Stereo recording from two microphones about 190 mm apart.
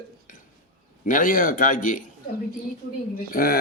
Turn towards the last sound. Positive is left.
turn(degrees=50)  # may be behind; listen again after turning